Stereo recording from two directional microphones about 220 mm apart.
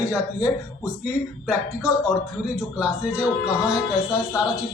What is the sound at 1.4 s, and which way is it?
Speech, 5° right (ahead or behind).